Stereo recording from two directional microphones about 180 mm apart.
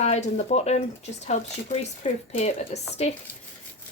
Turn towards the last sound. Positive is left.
turn(degrees=35)  # may be behind; listen again after turning